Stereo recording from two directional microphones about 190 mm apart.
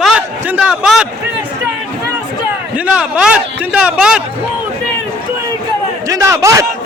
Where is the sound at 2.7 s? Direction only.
5° right (ahead or behind).